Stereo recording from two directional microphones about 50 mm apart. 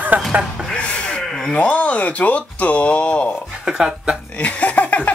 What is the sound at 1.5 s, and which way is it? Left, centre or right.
Speech, left.